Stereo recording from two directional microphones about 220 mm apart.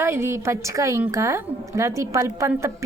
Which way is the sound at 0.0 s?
10° right (ahead or behind).